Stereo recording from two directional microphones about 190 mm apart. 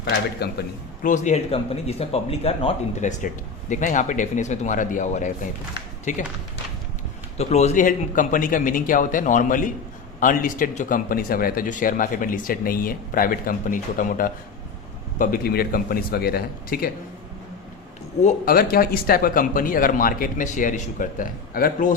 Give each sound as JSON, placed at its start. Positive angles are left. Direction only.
{"t": 0.0, "sound": "a man's voice", "side_deg": 60}
{"t": 1.0, "sound": "speech", "side_deg": 40}
{"t": 7.3, "sound": "speech", "side_deg": 35}
{"t": 18.2, "sound": "speech", "side_deg": 50}